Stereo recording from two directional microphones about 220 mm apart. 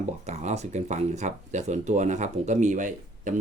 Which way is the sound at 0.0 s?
30° right (ahead or behind).